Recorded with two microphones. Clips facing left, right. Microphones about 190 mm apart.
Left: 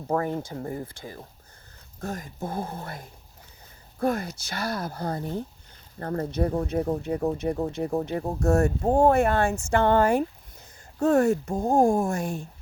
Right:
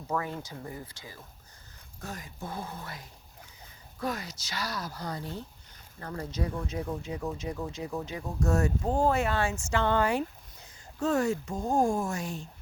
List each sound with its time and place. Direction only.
0.1 s speech: 50° left (ahead or behind)